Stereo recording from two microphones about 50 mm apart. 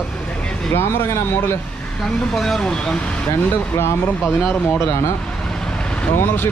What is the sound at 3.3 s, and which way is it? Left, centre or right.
Speech, left.